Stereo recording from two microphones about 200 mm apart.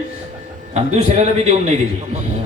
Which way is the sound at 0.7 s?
35° right (ahead or behind).